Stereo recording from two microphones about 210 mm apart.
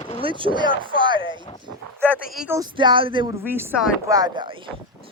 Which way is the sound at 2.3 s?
5° right (ahead or behind).